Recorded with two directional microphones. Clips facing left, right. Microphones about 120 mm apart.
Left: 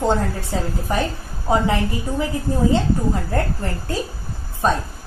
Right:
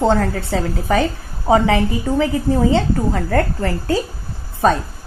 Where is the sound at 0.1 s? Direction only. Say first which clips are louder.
Right 4 dB; 80° right.